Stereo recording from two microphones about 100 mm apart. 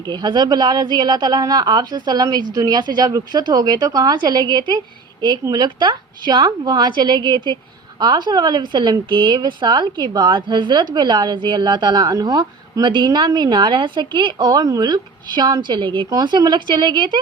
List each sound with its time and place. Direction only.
0.1 s a woman's voice: 50° right (ahead or behind)
16.1 s a woman's voice: 45° right (ahead or behind)